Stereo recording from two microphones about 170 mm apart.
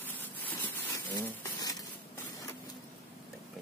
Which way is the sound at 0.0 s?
10° left (ahead or behind).